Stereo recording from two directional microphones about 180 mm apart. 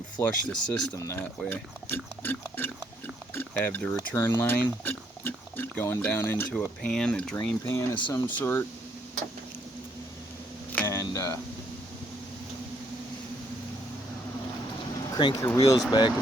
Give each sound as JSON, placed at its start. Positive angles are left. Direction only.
{"t": 0.2, "sound": "speech", "side_deg": 10}
{"t": 3.3, "sound": "boiling", "side_deg": 10}
{"t": 3.9, "sound": "speech", "side_deg": 15}
{"t": 10.7, "sound": "a sound", "side_deg": 10}
{"t": 15.2, "sound": "speech", "side_deg": 25}